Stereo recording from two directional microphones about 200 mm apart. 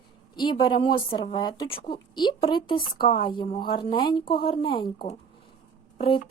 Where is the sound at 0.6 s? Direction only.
25° left (ahead or behind).